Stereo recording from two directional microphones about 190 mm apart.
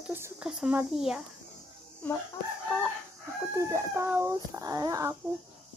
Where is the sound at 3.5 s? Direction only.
15° right (ahead or behind).